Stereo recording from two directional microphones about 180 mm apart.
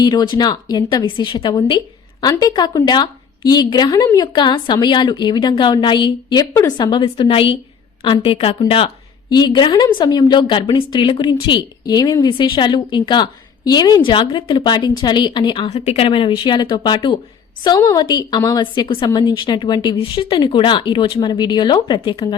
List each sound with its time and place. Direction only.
0.0 s a woman's voice: 25° left (ahead or behind)